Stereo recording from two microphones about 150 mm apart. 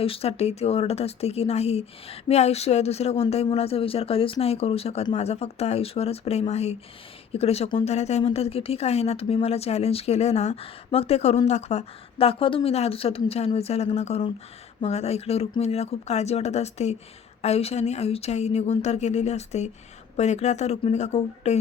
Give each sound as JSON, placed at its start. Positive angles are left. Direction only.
{"t": 0.0, "sound": "speech", "side_deg": 40}